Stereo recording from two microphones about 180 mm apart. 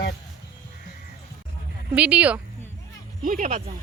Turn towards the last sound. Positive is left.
turn(degrees=-40)  # may be behind; listen again after turning